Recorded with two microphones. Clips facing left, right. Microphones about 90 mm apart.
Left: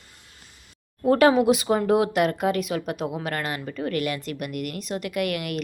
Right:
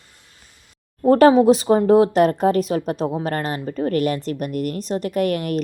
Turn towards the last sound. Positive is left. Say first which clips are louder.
# right 6 dB
turn(degrees=-35)  # may be behind; listen again after turning